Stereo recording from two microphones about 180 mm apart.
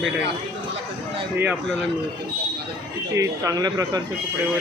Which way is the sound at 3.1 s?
15° right (ahead or behind).